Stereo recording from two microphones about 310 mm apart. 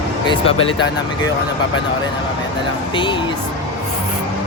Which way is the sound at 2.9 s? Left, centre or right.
Centre.